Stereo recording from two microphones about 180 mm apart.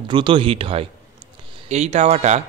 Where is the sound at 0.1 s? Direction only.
30° right (ahead or behind).